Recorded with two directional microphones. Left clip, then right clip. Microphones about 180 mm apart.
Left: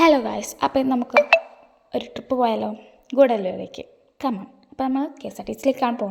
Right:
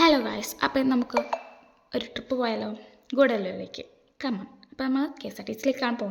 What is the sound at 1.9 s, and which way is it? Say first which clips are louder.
A woman's voice: left 4 dB; 10° left (ahead or behind).